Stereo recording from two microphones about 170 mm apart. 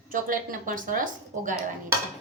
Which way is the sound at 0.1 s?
55° right (ahead or behind).